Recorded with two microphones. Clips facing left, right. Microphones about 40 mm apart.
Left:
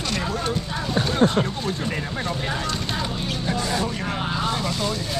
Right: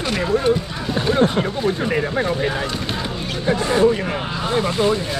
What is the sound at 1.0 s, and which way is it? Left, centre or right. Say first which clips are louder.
Speech: right 4 dB; centre.